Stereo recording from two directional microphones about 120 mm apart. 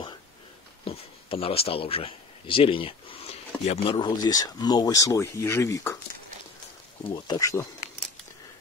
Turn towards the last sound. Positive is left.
turn(degrees=30)  # may be behind; listen again after turning